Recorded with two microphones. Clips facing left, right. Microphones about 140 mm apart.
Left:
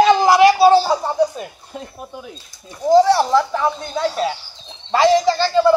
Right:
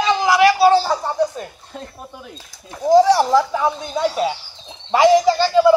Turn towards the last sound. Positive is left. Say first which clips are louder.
# right 1 dB
turn(degrees=-10)  # may be behind; listen again after turning